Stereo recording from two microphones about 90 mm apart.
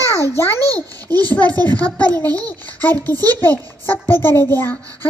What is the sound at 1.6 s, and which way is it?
A child's voice, 15° left (ahead or behind).